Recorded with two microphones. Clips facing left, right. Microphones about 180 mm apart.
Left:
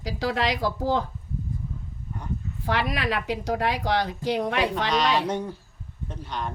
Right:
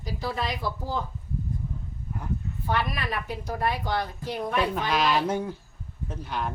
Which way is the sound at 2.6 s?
85° left.